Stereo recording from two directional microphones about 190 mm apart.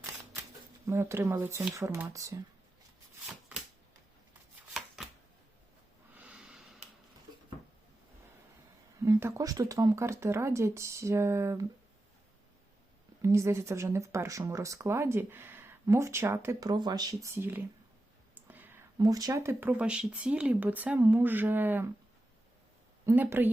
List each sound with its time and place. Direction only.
0.9 s speech: 15° right (ahead or behind)
6.1 s snort: 5° right (ahead or behind)
9.0 s speech: 15° right (ahead or behind)
13.2 s speech: 15° right (ahead or behind)
23.0 s speech: 10° right (ahead or behind)